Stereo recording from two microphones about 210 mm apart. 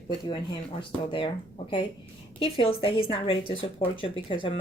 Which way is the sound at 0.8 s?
25° left (ahead or behind).